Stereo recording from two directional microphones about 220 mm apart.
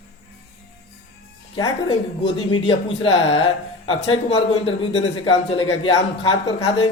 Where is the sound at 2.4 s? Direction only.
25° left (ahead or behind).